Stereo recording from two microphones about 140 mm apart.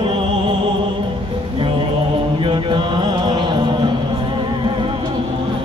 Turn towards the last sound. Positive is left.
turn(degrees=-35)  # may be behind; listen again after turning